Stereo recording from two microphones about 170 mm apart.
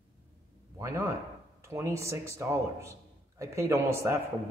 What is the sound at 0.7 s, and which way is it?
A man's voice, 15° right (ahead or behind).